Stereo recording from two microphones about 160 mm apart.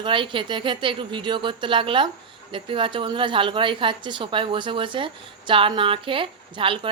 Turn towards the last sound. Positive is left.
turn(degrees=-35)  # may be behind; listen again after turning